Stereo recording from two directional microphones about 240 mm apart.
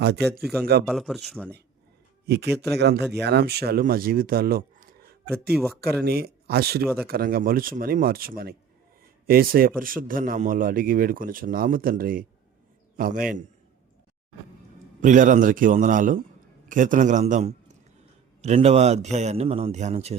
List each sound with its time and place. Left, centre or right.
0.3 s a man's voice: centre
0.6 s a man's voice: right
0.9 s a man's voice: centre
2.2 s a man's voice: right
5.3 s a man's voice: centre
6.0 s speech: right
15.0 s a man's voice: right